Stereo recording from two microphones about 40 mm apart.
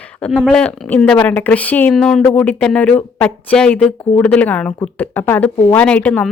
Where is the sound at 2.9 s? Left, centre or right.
Left.